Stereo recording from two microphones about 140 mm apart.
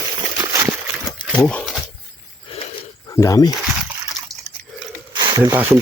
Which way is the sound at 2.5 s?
40° left (ahead or behind).